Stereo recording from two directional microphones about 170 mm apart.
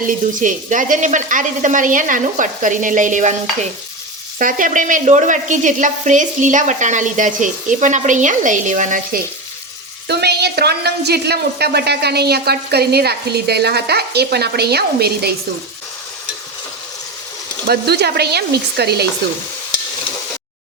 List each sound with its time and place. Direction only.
0.0 s a woman's voice: 50° right (ahead or behind)
4.4 s a woman's voice: 50° right (ahead or behind)
10.1 s a woman's voice: 75° right (ahead or behind)
17.7 s a woman's voice: 70° right (ahead or behind)